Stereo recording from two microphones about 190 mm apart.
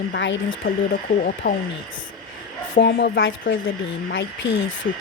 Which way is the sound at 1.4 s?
50° left (ahead or behind).